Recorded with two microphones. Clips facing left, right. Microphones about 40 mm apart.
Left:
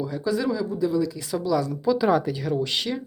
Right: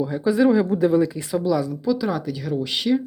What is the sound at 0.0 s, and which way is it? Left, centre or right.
Speech, right.